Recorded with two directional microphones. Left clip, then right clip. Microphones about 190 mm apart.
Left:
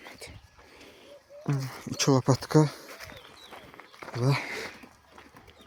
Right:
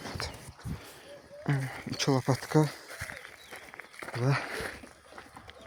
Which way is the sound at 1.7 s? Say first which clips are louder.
Left 5 dB; 20° left (ahead or behind).